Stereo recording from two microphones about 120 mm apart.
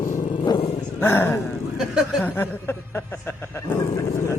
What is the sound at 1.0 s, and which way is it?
Speech, 20° left (ahead or behind).